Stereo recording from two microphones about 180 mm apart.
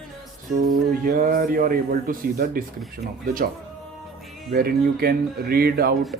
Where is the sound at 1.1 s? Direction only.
50° right (ahead or behind).